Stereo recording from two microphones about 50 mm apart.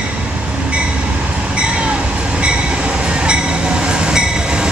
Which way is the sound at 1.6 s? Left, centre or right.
Right.